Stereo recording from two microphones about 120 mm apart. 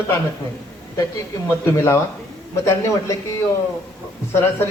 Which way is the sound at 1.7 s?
25° left (ahead or behind).